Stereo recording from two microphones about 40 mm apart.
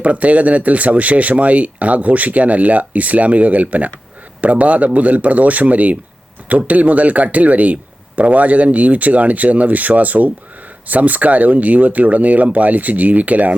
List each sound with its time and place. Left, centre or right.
0.0 s speech: right